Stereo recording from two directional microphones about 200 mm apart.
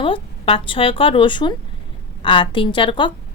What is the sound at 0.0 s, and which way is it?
A woman's voice, 25° left (ahead or behind).